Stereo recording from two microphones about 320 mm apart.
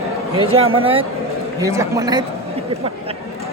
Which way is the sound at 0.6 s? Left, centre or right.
Centre.